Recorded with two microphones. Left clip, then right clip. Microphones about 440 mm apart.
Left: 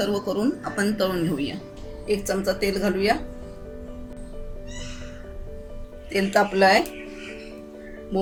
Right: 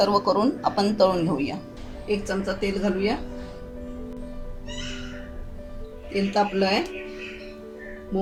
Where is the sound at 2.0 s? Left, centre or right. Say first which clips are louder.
Left 3 dB; centre.